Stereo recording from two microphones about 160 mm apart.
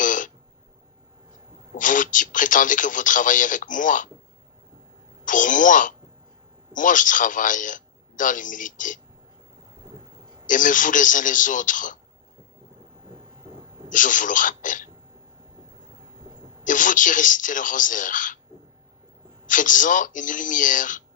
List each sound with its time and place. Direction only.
0.0 s a sound: 55° left (ahead or behind)
1.7 s a man's voice: 55° left (ahead or behind)
5.2 s a man's voice: 55° left (ahead or behind)
10.4 s a man's voice: 55° left (ahead or behind)
13.9 s a man's voice: 55° left (ahead or behind)
16.6 s a man's voice: 55° left (ahead or behind)
19.5 s a man's voice: 55° left (ahead or behind)